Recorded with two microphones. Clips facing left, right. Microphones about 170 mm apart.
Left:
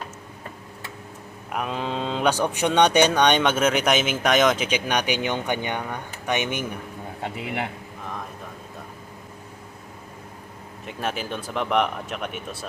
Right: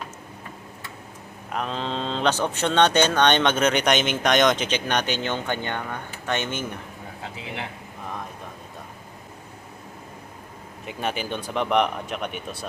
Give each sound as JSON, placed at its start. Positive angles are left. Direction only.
{"t": 1.5, "sound": "speech", "side_deg": 10}
{"t": 7.3, "sound": "a man's voice", "side_deg": 60}
{"t": 10.8, "sound": "speech", "side_deg": 0}